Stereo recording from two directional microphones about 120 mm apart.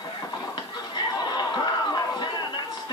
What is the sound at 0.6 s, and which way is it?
Chatter, 35° left (ahead or behind).